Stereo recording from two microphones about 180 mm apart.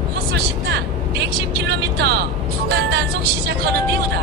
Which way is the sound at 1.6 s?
65° right (ahead or behind).